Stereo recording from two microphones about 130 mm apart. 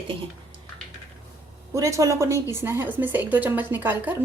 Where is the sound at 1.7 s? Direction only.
25° right (ahead or behind).